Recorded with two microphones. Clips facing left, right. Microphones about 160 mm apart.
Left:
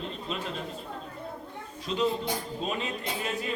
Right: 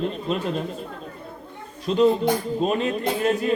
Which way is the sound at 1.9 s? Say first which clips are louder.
Right 10 dB; 50° right (ahead or behind).